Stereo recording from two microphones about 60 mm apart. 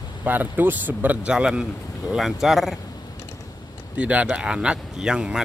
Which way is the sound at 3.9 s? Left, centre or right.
Right.